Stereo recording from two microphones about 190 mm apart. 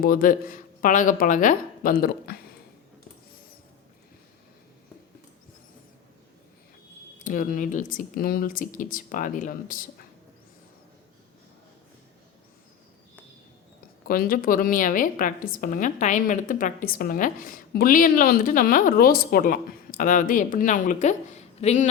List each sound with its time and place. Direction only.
0.0 s speech: 50° left (ahead or behind)
7.2 s a woman's voice: 45° left (ahead or behind)
14.1 s a woman's voice: 50° left (ahead or behind)